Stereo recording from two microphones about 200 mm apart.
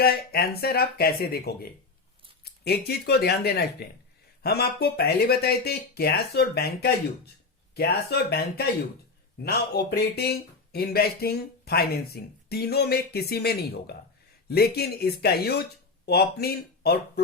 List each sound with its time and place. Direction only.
0.0 s speech: 50° left (ahead or behind)
7.8 s speech: 50° left (ahead or behind)